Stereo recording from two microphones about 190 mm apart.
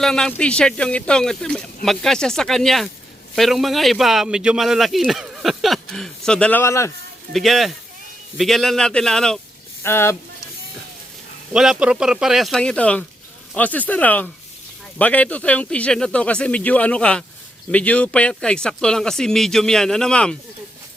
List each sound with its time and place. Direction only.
0.0 s speech: 5° left (ahead or behind)
7.3 s speech: centre (ahead or behind)
11.5 s speech: 5° right (ahead or behind)